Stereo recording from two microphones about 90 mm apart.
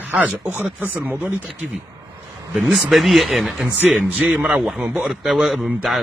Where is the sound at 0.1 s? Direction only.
15° right (ahead or behind).